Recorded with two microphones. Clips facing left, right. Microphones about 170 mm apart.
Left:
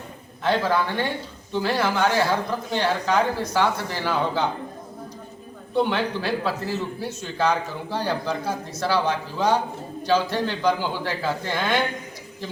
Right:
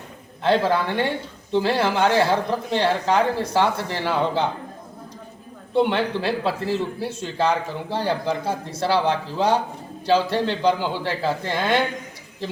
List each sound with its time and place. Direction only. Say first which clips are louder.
0.4 s a man's voice: right 2 dB; 30° right (ahead or behind)
5.7 s a man's voice: right 2 dB; 25° right (ahead or behind)